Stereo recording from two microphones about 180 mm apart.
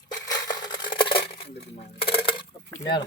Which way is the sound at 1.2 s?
65° left (ahead or behind).